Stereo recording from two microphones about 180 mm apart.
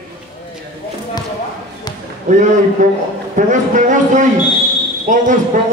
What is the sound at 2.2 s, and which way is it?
Speech, 45° right (ahead or behind).